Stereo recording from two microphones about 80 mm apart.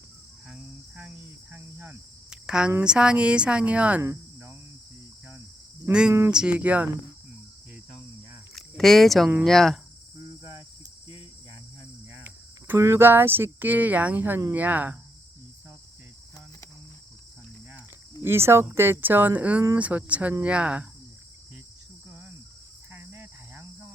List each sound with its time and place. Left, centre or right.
0.4 s cricket: centre
1.5 s speech: right
2.3 s a sound: centre
2.8 s speech: centre
5.8 s speech: centre
8.5 s a sound: centre
9.4 s speech: centre
10.2 s cricket: right
12.2 s cricket: right
12.8 s speech: right
18.2 s speech: right; by 20.8 s centre
22.9 s cricket: right